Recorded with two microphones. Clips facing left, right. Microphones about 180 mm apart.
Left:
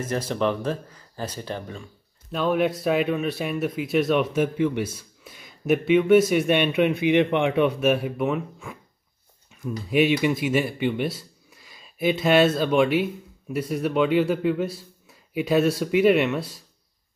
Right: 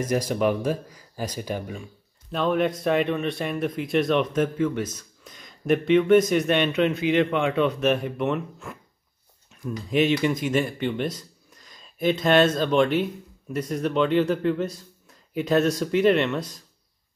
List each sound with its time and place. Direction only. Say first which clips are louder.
0.0 s speech: right 2 dB; 10° right (ahead or behind)
2.3 s speech: left 1 dB; 5° left (ahead or behind)